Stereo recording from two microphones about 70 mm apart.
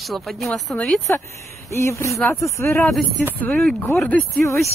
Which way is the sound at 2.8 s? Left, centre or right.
Centre.